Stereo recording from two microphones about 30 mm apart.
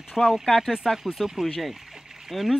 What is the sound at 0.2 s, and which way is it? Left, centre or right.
Speech, left.